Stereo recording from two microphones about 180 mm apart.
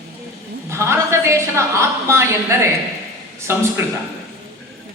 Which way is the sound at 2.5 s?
15° right (ahead or behind).